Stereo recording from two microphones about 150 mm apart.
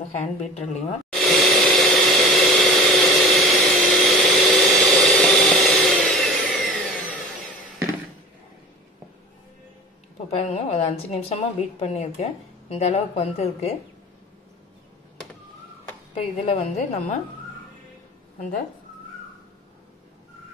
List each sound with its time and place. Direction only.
0.2 s a woman's voice: 50° left (ahead or behind)
1.2 s a sound: centre (ahead or behind)
10.3 s a woman's voice: 45° left (ahead or behind)
16.2 s a woman's voice: 40° left (ahead or behind)